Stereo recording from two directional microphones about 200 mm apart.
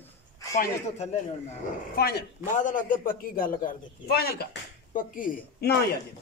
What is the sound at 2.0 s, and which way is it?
Speech, 50° left (ahead or behind).